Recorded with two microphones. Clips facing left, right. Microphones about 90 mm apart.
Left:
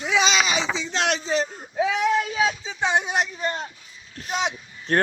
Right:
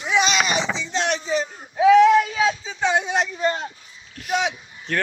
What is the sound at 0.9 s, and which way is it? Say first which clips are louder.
Speech: right 1 dB; 90° left.